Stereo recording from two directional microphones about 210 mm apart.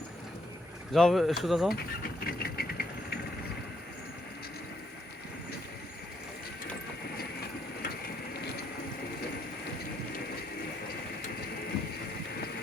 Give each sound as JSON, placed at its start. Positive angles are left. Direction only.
{"t": 0.9, "sound": "speech", "side_deg": 0}
{"t": 2.2, "sound": "vehicle", "side_deg": 45}